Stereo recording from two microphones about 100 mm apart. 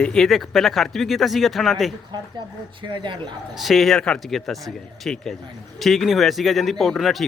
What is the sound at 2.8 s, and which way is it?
Speech, 50° right (ahead or behind).